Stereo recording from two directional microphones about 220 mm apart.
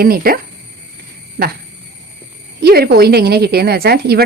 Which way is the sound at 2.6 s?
45° right (ahead or behind).